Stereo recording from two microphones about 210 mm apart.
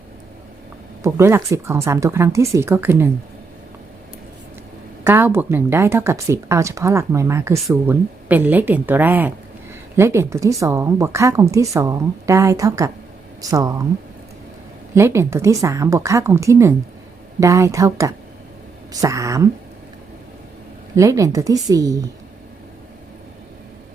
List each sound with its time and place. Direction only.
1.0 s speech: 15° right (ahead or behind)
5.0 s speech: 10° right (ahead or behind)
14.9 s speech: 10° right (ahead or behind)
20.9 s speech: 15° right (ahead or behind)